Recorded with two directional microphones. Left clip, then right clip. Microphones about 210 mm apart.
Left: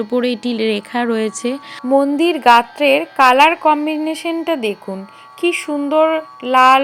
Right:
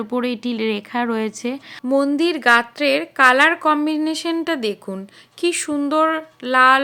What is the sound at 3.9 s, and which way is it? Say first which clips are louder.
Speech: left 2 dB; 40° right (ahead or behind).